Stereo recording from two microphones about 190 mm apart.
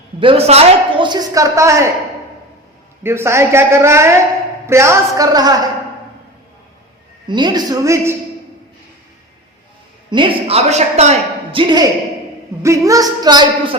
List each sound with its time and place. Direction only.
0.2 s a man's voice: 30° right (ahead or behind)
3.0 s a man's voice: 15° right (ahead or behind)
7.3 s a man's voice: 25° right (ahead or behind)
10.1 s a woman's voice: 25° right (ahead or behind)
11.5 s a man's voice: 25° right (ahead or behind)